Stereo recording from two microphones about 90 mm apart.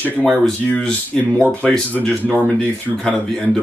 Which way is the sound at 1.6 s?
10° left (ahead or behind).